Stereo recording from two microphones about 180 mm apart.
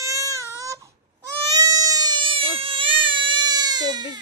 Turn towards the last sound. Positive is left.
turn(degrees=-20)  # may be behind; listen again after turning